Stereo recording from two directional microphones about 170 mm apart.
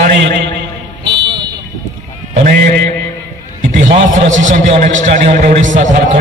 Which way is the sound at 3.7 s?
45° right (ahead or behind).